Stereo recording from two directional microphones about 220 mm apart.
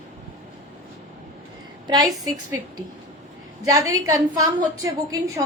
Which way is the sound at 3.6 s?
15° right (ahead or behind).